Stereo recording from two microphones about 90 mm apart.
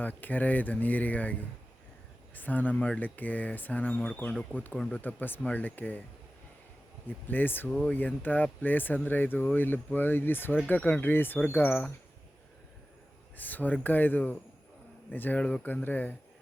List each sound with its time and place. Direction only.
0.0 s speech: 20° left (ahead or behind)
7.3 s speech: 20° left (ahead or behind)
13.3 s speech: 20° left (ahead or behind)